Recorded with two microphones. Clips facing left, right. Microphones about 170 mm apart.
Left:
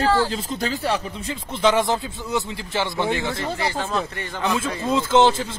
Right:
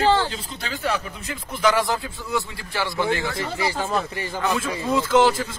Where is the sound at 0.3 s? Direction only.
45° left (ahead or behind); by 3.3 s 20° left (ahead or behind).